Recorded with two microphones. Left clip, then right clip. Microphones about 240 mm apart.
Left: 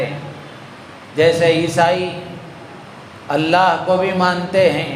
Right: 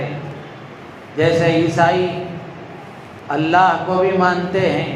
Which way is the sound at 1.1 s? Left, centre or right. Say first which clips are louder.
Left 2 dB; left.